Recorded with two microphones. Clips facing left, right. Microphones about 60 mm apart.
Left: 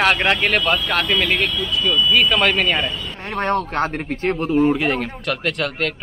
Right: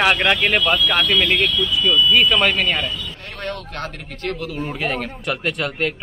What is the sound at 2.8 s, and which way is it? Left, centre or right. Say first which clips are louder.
Speech: left 2 dB; left.